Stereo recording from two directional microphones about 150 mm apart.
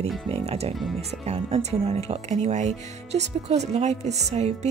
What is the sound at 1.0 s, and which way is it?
Speech, 40° right (ahead or behind).